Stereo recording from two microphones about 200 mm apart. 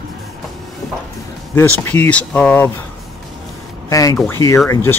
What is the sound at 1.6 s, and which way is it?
Speech, 10° left (ahead or behind).